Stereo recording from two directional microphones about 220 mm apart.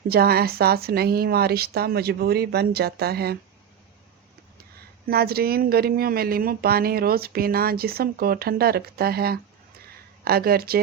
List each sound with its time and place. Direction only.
0.1 s speech: 45° right (ahead or behind)
5.0 s speech: 45° right (ahead or behind)